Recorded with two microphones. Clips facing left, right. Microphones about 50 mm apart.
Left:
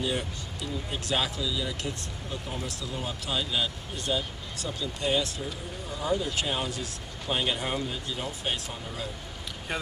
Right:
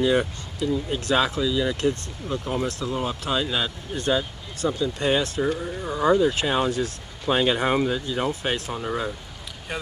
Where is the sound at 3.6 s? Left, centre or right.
Right.